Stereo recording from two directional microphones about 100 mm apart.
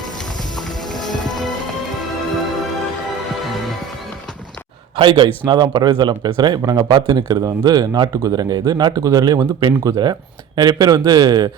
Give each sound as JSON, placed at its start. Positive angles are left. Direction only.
{"t": 1.2, "sound": "music", "side_deg": 45}
{"t": 4.9, "sound": "speech", "side_deg": -55}